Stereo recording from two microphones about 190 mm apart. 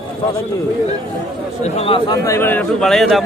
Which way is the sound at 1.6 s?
30° left (ahead or behind).